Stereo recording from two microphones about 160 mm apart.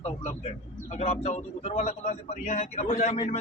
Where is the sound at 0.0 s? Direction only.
40° left (ahead or behind).